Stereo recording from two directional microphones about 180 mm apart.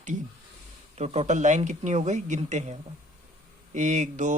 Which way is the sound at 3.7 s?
40° right (ahead or behind).